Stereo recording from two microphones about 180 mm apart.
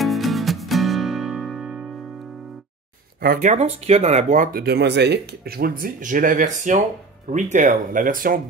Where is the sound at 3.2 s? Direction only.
55° right (ahead or behind).